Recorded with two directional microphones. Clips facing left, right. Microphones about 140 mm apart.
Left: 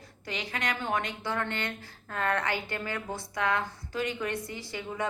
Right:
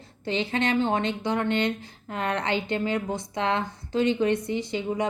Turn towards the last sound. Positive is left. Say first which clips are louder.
# right 9 dB
turn(degrees=-20)  # may be behind; listen again after turning